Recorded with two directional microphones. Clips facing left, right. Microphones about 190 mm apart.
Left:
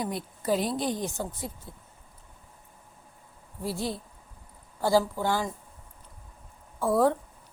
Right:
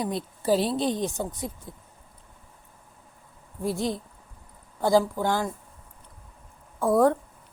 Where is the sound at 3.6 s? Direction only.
20° right (ahead or behind).